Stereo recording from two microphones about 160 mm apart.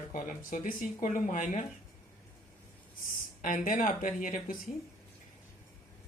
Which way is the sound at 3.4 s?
55° left (ahead or behind).